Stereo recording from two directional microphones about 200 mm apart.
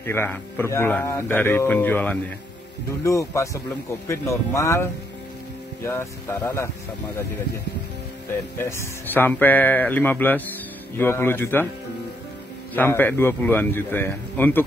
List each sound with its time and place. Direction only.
0.0 s speech: 10° left (ahead or behind)
5.9 s speech: 10° left (ahead or behind)
8.5 s speech: 10° left (ahead or behind)
12.7 s speech: 10° left (ahead or behind)